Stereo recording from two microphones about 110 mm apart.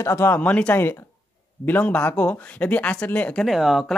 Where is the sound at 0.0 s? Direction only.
20° left (ahead or behind).